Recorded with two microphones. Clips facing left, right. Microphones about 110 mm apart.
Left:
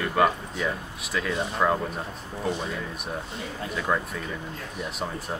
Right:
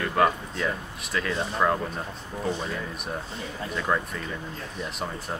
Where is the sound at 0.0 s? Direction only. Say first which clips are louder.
Even; centre (ahead or behind).